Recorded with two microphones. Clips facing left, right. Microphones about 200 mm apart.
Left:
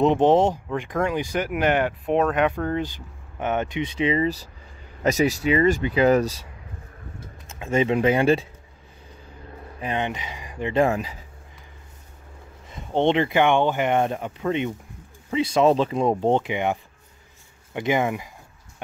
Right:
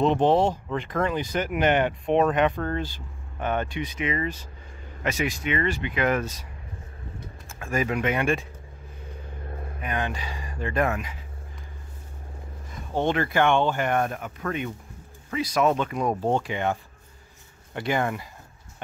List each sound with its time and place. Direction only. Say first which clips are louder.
0.0 s speech: left 3 dB; 15° left (ahead or behind); by 6.4 s 35° left (ahead or behind)
7.4 s speech: left 5 dB; 20° left (ahead or behind)
9.8 s speech: left 3 dB; 25° left (ahead or behind)
12.9 s speech: left 4 dB; 25° left (ahead or behind)
17.7 s speech: left 3 dB; 15° left (ahead or behind)